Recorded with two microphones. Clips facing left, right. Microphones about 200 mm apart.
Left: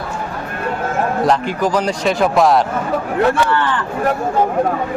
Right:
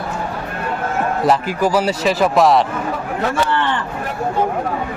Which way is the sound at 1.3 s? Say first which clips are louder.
Even; 5° right (ahead or behind).